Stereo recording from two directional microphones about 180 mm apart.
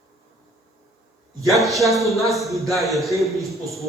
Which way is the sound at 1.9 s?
Centre (ahead or behind).